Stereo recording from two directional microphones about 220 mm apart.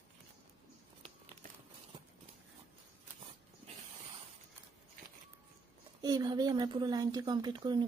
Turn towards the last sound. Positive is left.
turn(degrees=-20)  # may be behind; listen again after turning